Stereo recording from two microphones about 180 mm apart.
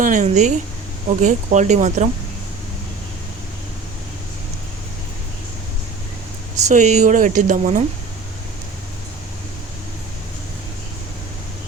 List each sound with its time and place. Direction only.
0.0 s speech: 45° right (ahead or behind)
6.7 s speech: 40° right (ahead or behind)